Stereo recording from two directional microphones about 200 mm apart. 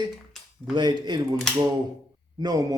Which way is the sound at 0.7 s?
20° right (ahead or behind).